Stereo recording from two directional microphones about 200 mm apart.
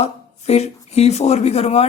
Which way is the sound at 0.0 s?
30° left (ahead or behind).